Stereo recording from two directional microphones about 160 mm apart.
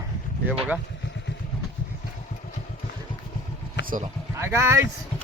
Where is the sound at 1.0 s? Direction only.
90° left.